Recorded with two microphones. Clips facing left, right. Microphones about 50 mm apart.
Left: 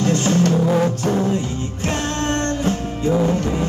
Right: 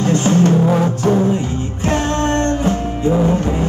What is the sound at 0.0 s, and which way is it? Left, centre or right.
Music, right.